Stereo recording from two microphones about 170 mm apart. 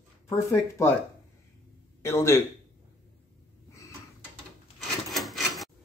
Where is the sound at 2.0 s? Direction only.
15° left (ahead or behind).